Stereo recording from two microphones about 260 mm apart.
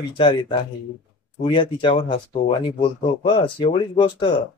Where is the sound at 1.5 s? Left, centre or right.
Centre.